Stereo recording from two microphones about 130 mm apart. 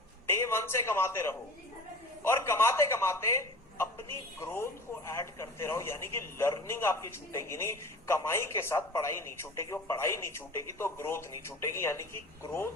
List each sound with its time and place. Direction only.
0.3 s a man's voice: 20° left (ahead or behind)